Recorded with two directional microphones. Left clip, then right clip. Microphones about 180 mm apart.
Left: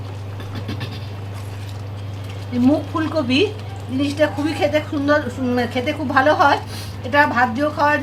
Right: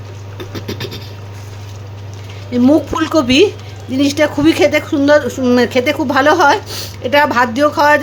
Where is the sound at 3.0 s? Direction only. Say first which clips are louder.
Right 8 dB; 60° right (ahead or behind).